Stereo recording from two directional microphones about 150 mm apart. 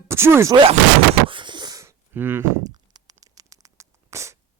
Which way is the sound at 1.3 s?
30° right (ahead or behind).